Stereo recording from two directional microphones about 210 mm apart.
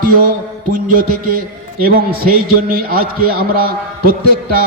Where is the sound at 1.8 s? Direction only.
45° right (ahead or behind).